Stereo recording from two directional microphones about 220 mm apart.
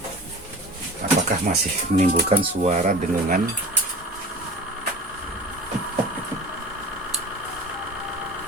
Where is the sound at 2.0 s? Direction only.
25° right (ahead or behind).